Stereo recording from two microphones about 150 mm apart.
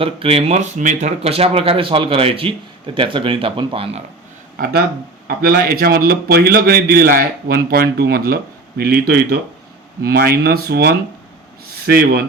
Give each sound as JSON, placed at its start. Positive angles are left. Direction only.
{"t": 0.0, "sound": "speech", "side_deg": -40}
{"t": 4.5, "sound": "a man's voice", "side_deg": -85}